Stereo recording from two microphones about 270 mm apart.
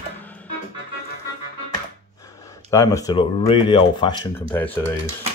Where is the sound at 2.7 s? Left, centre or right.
Centre.